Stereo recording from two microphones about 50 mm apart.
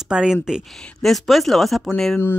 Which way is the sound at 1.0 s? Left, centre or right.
Centre.